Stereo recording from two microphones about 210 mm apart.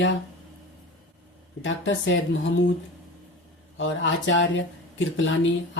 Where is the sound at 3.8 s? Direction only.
65° left (ahead or behind).